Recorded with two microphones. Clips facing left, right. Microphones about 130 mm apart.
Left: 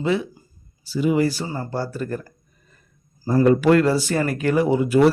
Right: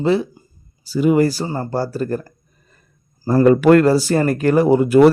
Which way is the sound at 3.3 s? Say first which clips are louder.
Right 4 dB; 65° right (ahead or behind).